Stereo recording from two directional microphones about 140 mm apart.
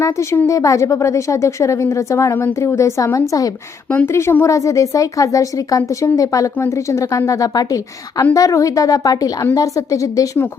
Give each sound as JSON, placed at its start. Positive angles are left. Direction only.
{"t": 0.0, "sound": "speech", "side_deg": 20}
{"t": 3.8, "sound": "speech", "side_deg": 15}